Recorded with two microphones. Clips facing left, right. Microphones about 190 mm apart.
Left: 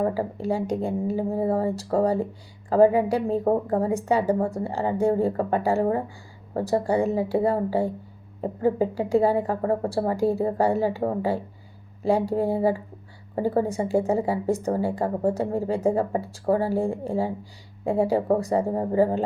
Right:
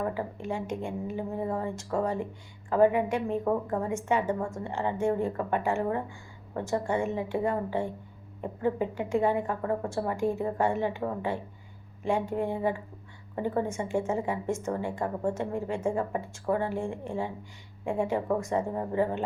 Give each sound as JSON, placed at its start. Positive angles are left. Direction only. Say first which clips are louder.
{"t": 0.0, "sound": "speech", "louder": "left 7 dB", "side_deg": 35}